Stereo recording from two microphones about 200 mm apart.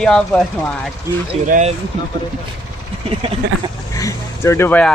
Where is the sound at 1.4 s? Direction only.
40° right (ahead or behind).